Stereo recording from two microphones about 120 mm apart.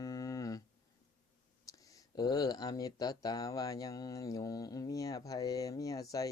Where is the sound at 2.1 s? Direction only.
35° left (ahead or behind).